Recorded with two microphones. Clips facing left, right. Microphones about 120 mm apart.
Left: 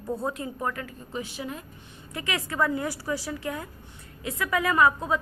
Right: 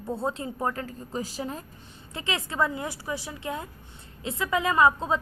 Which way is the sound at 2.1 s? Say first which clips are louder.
Even; 25° right (ahead or behind).